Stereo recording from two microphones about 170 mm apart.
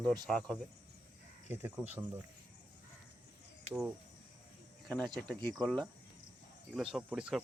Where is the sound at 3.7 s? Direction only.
5° right (ahead or behind).